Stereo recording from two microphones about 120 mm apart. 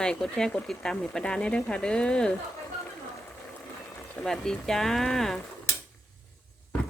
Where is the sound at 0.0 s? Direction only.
5° left (ahead or behind).